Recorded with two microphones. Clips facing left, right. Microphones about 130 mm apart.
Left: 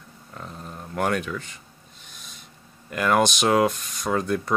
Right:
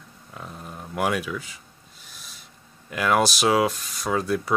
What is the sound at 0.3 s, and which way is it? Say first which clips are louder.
Speech: even; 5° right (ahead or behind).